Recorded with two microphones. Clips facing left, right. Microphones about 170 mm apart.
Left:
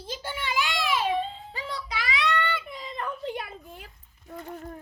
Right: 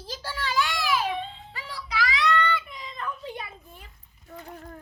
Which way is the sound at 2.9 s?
65° left (ahead or behind).